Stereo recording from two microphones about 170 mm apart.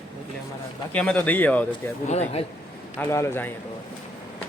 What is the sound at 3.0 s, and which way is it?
Speech, 15° left (ahead or behind).